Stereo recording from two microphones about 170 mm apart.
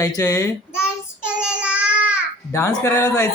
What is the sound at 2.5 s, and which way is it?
Speech, 20° left (ahead or behind).